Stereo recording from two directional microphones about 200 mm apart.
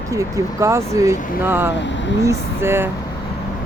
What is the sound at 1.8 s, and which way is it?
Speech, 65° left (ahead or behind).